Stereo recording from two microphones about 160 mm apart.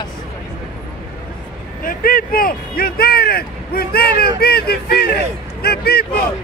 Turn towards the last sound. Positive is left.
turn(degrees=75)  # may be behind; listen again after turning